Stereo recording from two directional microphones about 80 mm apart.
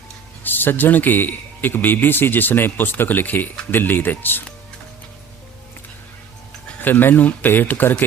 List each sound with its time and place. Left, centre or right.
0.4 s a man's voice: left
6.8 s a man's voice: left